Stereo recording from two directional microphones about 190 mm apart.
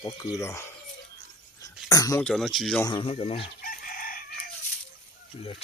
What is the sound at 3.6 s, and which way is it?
Chicken, 50° left (ahead or behind).